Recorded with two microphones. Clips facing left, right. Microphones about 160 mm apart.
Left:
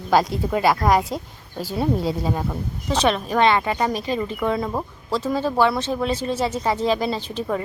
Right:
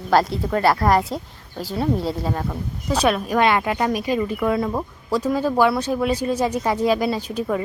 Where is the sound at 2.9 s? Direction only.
10° right (ahead or behind).